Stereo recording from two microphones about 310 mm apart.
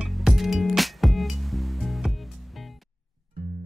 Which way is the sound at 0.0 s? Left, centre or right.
Centre.